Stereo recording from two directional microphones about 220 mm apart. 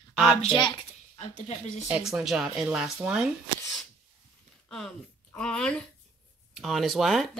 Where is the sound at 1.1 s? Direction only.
30° left (ahead or behind).